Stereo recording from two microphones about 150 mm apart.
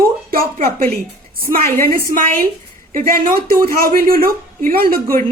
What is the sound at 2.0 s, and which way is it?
Speech, 70° right (ahead or behind).